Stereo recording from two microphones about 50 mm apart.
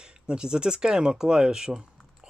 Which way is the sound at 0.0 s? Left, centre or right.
Centre.